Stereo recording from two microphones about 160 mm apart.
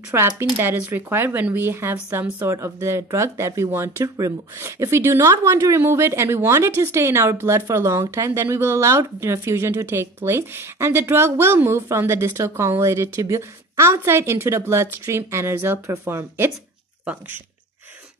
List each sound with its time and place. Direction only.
0.1 s speech: 15° right (ahead or behind)